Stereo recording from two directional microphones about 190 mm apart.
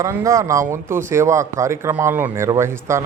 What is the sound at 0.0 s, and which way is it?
Speech, 15° right (ahead or behind).